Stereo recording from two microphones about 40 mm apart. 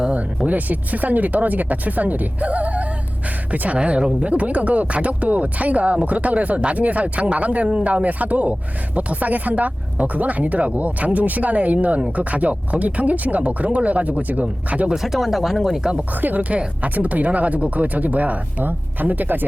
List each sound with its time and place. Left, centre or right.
0.4 s speech: right
15.0 s speech: centre
15.8 s speech: right
16.1 s speech: right
18.6 s speech: right